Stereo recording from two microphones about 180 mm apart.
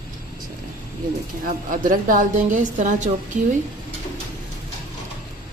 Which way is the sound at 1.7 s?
50° right (ahead or behind).